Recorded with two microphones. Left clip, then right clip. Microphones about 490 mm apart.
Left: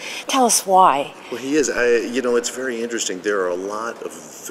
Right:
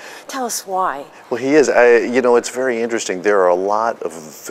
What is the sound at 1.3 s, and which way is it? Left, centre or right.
Speech, right.